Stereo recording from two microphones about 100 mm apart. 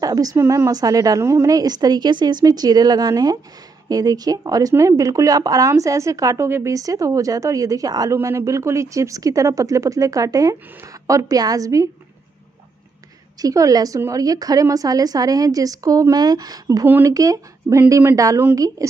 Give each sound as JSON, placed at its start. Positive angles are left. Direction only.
{"t": 0.0, "sound": "speech", "side_deg": -40}
{"t": 13.4, "sound": "speech", "side_deg": -35}
{"t": 16.8, "sound": "speech", "side_deg": -20}
{"t": 17.1, "sound": "speech", "side_deg": -35}